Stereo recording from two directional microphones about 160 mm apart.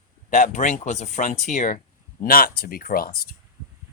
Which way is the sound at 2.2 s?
65° left (ahead or behind).